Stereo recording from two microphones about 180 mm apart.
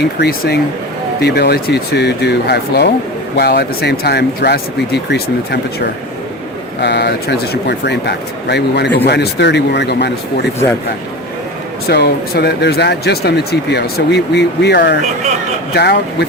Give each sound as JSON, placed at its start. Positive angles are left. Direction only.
{"t": 0.2, "sound": "speech", "side_deg": 65}
{"t": 6.8, "sound": "speech", "side_deg": 70}
{"t": 11.9, "sound": "speech", "side_deg": 65}
{"t": 15.0, "sound": "speech", "side_deg": -40}
{"t": 15.7, "sound": "speech", "side_deg": 65}